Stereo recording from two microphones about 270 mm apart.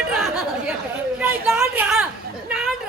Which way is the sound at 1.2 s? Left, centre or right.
Centre.